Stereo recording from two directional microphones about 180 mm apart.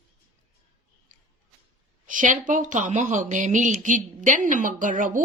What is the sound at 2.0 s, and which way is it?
A woman's voice, 45° right (ahead or behind).